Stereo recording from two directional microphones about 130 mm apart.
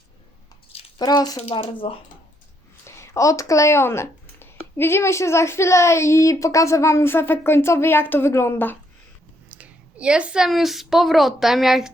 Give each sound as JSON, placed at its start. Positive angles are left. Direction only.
{"t": 0.9, "sound": "speech", "side_deg": 30}
{"t": 1.4, "sound": "speech", "side_deg": 50}
{"t": 2.8, "sound": "speech", "side_deg": 25}
{"t": 9.5, "sound": "a woman's voice", "side_deg": -10}